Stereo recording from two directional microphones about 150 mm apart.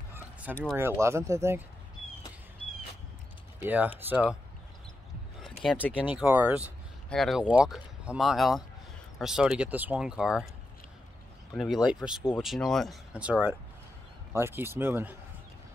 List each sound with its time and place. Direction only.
0.1 s a sound: 15° right (ahead or behind)
0.7 s speech: 15° right (ahead or behind)
3.5 s speech: 10° right (ahead or behind)
5.4 s a sound: 5° left (ahead or behind)
6.2 s speech: 10° right (ahead or behind)
7.1 s speech: centre (ahead or behind)
11.5 s speech: centre (ahead or behind); by 15.1 s 15° right (ahead or behind)